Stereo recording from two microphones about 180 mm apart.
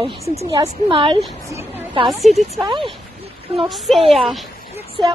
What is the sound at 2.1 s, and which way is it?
Speech, centre (ahead or behind).